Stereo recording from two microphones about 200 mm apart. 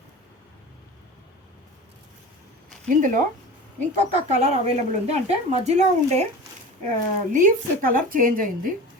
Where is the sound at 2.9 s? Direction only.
40° right (ahead or behind).